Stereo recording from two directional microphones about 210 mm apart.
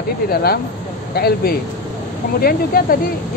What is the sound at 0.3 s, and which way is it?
Speech, 45° left (ahead or behind).